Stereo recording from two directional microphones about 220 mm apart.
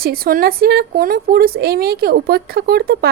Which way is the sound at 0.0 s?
45° right (ahead or behind).